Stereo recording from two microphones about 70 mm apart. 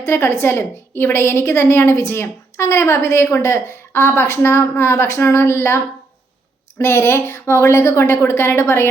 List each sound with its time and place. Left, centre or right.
0.0 s a woman's voice: left